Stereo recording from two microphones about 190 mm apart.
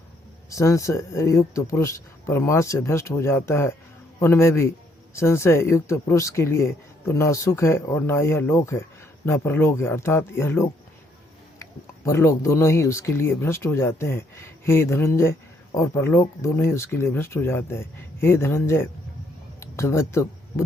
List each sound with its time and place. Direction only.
0.5 s speech: 15° left (ahead or behind)